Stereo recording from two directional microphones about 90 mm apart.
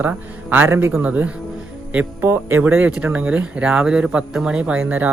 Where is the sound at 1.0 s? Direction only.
15° right (ahead or behind).